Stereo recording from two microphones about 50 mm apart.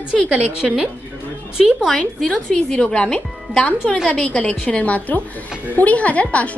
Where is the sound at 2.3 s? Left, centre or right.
Centre.